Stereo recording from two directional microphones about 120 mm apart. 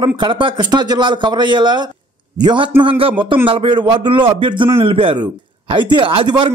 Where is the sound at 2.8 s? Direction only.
50° right (ahead or behind).